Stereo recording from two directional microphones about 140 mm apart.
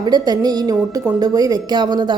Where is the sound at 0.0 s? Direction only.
30° right (ahead or behind).